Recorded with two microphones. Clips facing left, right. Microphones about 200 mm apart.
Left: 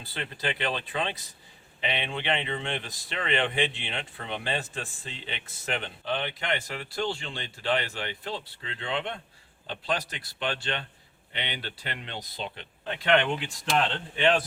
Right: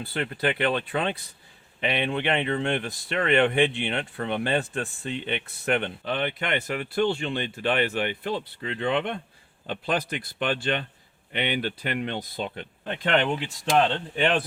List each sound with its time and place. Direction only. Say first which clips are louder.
0.0 s speech: right 7 dB; 60° right (ahead or behind)